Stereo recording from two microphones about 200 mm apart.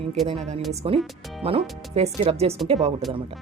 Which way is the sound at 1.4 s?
30° right (ahead or behind).